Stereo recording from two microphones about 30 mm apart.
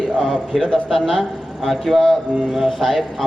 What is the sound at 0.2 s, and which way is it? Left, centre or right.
A man's voice, centre.